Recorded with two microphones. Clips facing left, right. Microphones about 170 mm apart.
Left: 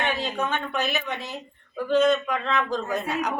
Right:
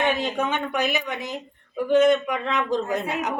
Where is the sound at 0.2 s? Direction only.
15° right (ahead or behind).